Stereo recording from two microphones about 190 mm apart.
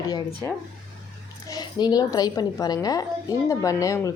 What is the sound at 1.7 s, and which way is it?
Speech, 20° left (ahead or behind).